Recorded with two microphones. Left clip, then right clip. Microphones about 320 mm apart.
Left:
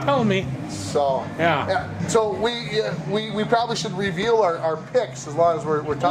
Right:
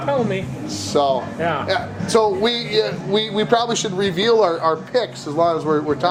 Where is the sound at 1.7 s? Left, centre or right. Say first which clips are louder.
Right 3 dB; right.